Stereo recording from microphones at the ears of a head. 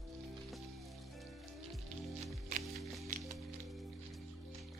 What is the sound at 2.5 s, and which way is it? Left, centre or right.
Music, right.